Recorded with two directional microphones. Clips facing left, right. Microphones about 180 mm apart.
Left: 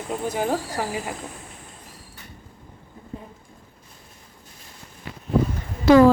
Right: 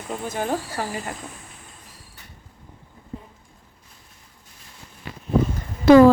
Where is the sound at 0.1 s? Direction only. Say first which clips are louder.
Left 1 dB; 10° left (ahead or behind).